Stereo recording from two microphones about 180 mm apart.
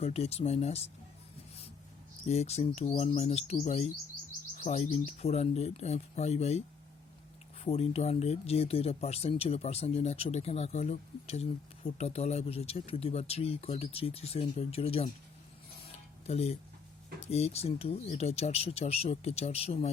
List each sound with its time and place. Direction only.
0.0 s speech: 35° left (ahead or behind)
2.2 s speech: 35° left (ahead or behind)
7.6 s speech: 35° left (ahead or behind)
16.2 s speech: 35° left (ahead or behind)